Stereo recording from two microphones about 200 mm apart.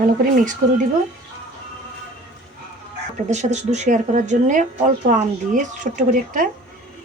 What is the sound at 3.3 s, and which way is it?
Speech, 35° right (ahead or behind).